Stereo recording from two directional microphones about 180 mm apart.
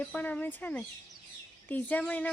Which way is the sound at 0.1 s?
10° left (ahead or behind).